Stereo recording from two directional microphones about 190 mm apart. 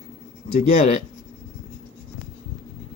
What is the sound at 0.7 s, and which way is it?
Speech, 35° left (ahead or behind).